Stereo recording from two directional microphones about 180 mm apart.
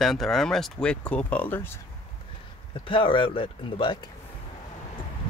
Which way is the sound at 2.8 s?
30° left (ahead or behind).